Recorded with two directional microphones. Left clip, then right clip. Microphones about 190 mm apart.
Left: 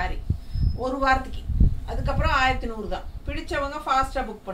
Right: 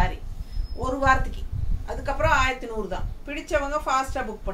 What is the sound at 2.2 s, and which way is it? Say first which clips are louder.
A woman's voice: right 1 dB; 15° right (ahead or behind).